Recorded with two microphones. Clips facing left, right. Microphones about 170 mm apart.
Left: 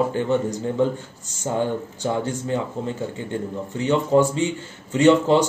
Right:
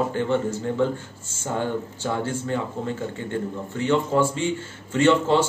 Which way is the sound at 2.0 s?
20° left (ahead or behind).